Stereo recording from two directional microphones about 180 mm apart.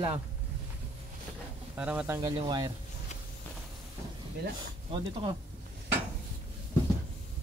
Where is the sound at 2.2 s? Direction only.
25° right (ahead or behind).